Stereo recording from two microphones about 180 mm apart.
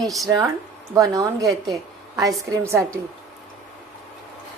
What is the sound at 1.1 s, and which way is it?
A woman's voice, 20° right (ahead or behind).